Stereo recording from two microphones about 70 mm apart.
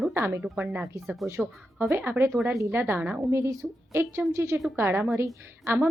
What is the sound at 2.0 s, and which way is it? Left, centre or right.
A woman's voice, right.